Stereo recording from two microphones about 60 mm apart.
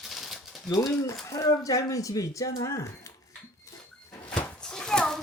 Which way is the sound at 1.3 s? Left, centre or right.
Left.